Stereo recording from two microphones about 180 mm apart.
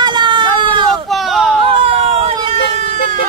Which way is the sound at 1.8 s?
35° right (ahead or behind).